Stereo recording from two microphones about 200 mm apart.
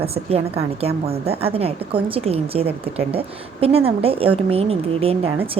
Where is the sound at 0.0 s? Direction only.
30° right (ahead or behind).